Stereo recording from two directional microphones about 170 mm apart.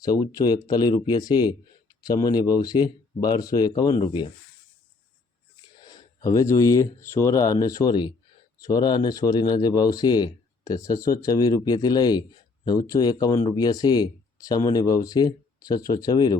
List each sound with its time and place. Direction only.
0.0 s speech: 20° left (ahead or behind)
5.8 s speech: 25° left (ahead or behind)